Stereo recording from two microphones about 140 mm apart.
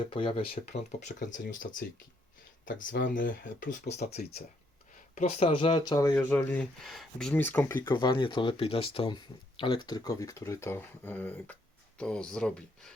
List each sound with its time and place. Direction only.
0.0 s speech: 40° left (ahead or behind); by 1.6 s 65° left (ahead or behind)
2.6 s speech: 70° left (ahead or behind)
5.1 s speech: 50° left (ahead or behind); by 6.1 s 30° left (ahead or behind)
6.1 s speech: 15° left (ahead or behind)
6.8 s speech: 5° left (ahead or behind)
7.9 s speech: 30° left (ahead or behind); by 12.9 s 5° left (ahead or behind)